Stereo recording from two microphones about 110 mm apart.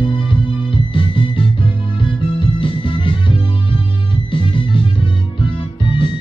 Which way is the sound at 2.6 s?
50° left (ahead or behind).